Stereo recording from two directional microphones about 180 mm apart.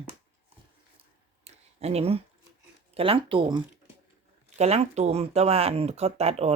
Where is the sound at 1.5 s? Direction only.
35° right (ahead or behind).